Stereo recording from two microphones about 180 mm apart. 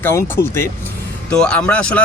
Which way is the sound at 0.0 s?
15° left (ahead or behind).